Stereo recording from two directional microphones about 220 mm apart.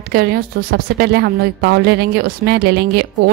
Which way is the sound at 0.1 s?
45° right (ahead or behind).